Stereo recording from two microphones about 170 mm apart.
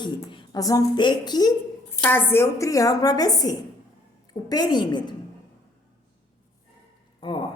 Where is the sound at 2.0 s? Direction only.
10° left (ahead or behind).